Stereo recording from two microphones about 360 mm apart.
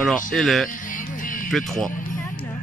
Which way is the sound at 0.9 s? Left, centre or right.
Left.